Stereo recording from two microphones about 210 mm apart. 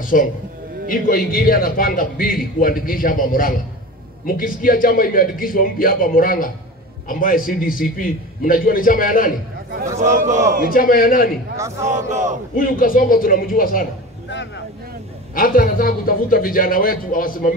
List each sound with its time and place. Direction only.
0.0 s a man's voice: 40° left (ahead or behind)
10.1 s speech: 35° right (ahead or behind)
10.7 s a man's voice: 45° left (ahead or behind)
11.5 s a man's voice: 15° right (ahead or behind)
11.9 s speech: 35° right (ahead or behind)
12.5 s a man's voice: 40° left (ahead or behind)
15.3 s a man's voice: 40° left (ahead or behind)